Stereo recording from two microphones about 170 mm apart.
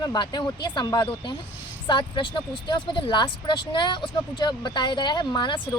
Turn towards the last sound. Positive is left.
turn(degrees=25)  # may be behind; listen again after turning